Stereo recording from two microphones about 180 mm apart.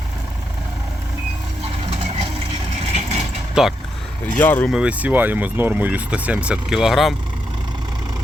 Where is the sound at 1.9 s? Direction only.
35° right (ahead or behind).